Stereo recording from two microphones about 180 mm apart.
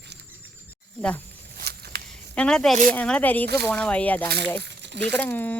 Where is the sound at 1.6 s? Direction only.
60° right (ahead or behind).